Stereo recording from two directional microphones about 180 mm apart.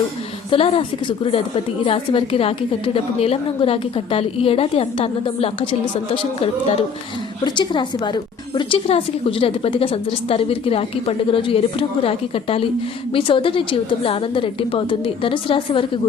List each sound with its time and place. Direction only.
0.5 s a woman's voice: 30° left (ahead or behind)